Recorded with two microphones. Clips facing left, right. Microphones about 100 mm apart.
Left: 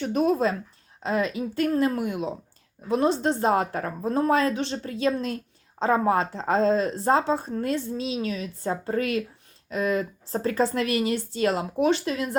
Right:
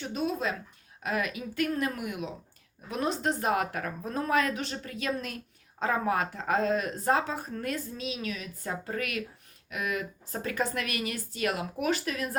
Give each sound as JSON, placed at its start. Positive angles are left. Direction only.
{"t": 0.0, "sound": "speech", "side_deg": 45}